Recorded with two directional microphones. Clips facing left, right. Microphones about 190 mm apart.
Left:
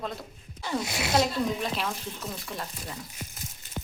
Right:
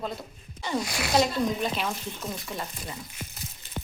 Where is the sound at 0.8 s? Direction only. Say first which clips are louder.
Even; 25° left (ahead or behind).